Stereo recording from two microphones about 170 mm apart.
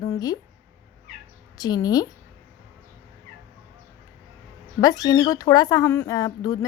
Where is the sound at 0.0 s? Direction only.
20° left (ahead or behind).